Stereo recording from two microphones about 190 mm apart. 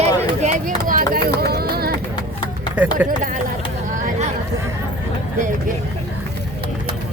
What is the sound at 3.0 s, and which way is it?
Speech, 10° right (ahead or behind).